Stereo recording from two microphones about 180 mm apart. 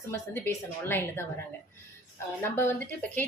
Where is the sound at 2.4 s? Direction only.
10° left (ahead or behind).